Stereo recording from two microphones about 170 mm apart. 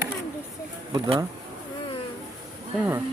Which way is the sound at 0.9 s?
35° right (ahead or behind).